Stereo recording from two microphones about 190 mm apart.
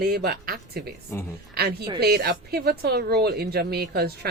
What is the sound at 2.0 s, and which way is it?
Speech, 55° right (ahead or behind).